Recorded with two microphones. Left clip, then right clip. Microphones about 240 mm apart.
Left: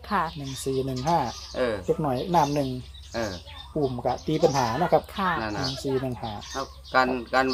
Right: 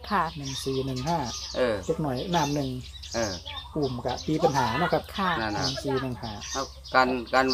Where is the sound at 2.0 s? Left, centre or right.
Left.